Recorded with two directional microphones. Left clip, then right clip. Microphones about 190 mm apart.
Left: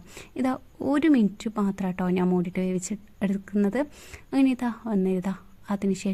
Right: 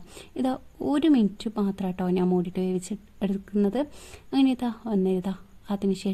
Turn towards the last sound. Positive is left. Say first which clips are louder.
# even
turn(degrees=20)  # may be behind; listen again after turning